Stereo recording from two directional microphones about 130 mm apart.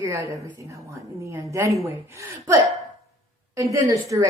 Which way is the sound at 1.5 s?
25° right (ahead or behind).